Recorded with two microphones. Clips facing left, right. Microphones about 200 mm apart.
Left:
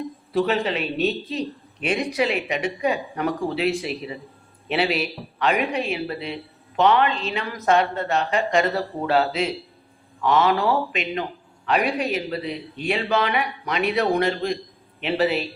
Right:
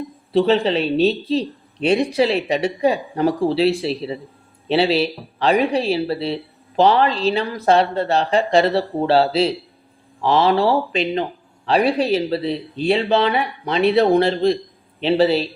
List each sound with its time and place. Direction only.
0.3 s speech: 30° right (ahead or behind)